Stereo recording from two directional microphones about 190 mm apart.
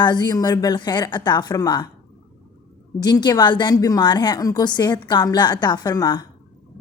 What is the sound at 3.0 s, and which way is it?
Speech, 20° left (ahead or behind).